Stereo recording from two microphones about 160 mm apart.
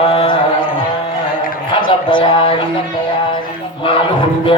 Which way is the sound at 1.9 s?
35° left (ahead or behind).